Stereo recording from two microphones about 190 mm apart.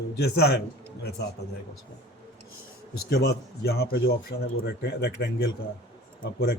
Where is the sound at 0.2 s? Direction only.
55° left (ahead or behind).